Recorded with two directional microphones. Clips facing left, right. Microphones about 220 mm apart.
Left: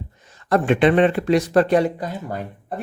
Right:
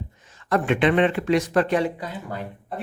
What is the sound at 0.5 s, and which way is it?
Speech, 35° left (ahead or behind).